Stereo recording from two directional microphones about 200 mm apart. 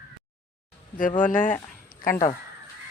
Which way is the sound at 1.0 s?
40° left (ahead or behind).